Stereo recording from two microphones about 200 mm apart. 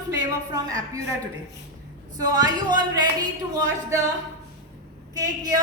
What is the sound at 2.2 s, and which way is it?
Speech, 20° right (ahead or behind).